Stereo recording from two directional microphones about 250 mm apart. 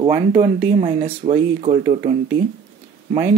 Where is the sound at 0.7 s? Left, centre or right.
Right.